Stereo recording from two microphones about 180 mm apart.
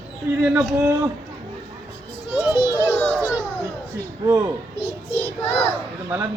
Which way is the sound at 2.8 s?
10° left (ahead or behind).